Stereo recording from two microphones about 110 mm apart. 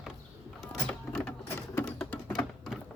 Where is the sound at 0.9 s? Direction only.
10° left (ahead or behind).